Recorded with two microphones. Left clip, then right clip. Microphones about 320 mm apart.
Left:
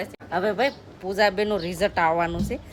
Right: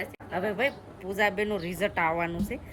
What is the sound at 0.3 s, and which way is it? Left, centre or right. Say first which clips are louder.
A woman's voice: left 5 dB; centre.